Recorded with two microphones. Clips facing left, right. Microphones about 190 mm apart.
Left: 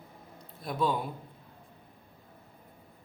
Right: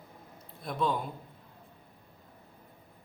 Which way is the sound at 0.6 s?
5° left (ahead or behind).